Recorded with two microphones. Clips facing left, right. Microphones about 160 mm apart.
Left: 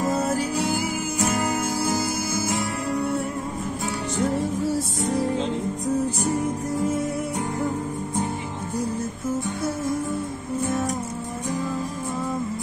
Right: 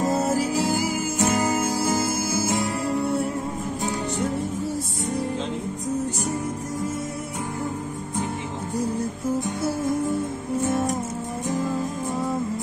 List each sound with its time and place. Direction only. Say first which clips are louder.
0.0 s music: right 1 dB; 25° right (ahead or behind)
0.4 s music: right 2 dB; centre (ahead or behind)